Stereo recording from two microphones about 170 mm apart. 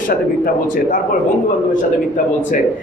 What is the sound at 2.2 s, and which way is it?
Speech, 50° left (ahead or behind).